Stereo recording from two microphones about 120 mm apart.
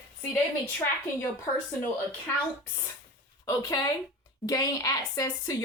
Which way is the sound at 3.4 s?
35° left (ahead or behind).